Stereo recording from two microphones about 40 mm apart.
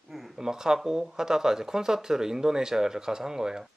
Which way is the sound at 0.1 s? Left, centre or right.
Centre.